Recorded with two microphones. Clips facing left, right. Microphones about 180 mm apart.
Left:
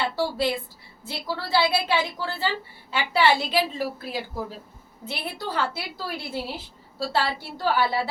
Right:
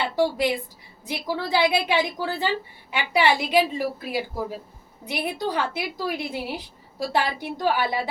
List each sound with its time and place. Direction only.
0.2 s a woman's voice: 15° right (ahead or behind)